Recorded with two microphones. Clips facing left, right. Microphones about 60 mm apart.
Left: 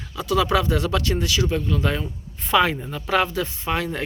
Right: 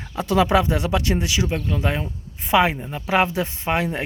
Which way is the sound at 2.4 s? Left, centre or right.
Centre.